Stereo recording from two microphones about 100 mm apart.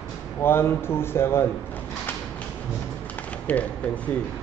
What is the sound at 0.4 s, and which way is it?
Speech, 25° left (ahead or behind).